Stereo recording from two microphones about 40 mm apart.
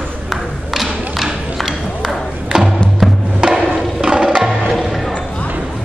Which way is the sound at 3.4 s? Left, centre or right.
Right.